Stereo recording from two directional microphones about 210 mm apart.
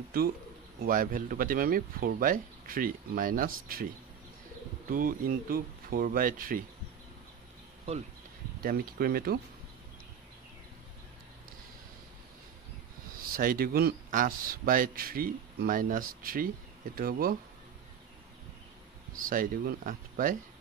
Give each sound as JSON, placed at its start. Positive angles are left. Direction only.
{"t": 0.8, "sound": "speech", "side_deg": -40}
{"t": 8.6, "sound": "speech", "side_deg": -45}
{"t": 13.2, "sound": "speech", "side_deg": -45}
{"t": 19.1, "sound": "speech", "side_deg": -40}